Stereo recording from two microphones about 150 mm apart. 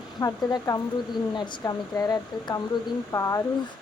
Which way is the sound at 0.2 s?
25° left (ahead or behind).